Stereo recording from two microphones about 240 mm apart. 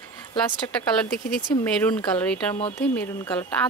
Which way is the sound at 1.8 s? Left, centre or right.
Centre.